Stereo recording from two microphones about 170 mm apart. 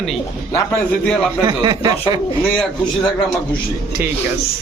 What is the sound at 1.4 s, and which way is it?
Speech, 25° right (ahead or behind).